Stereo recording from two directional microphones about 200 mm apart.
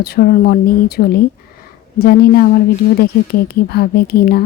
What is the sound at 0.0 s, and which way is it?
A woman's voice, 50° left (ahead or behind).